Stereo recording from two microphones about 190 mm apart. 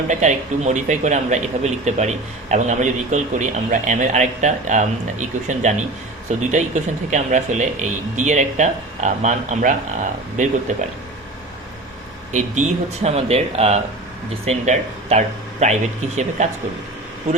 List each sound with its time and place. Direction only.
0.1 s speech: 40° right (ahead or behind)
12.3 s speech: 40° right (ahead or behind)